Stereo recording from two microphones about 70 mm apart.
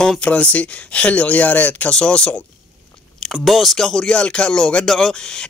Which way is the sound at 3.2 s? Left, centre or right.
Centre.